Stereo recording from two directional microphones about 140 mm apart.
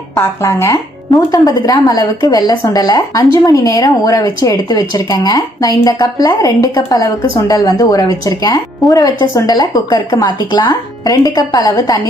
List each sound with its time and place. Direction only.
0.2 s a woman's voice: 20° left (ahead or behind)